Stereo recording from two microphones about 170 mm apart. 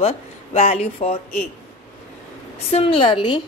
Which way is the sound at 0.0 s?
35° left (ahead or behind).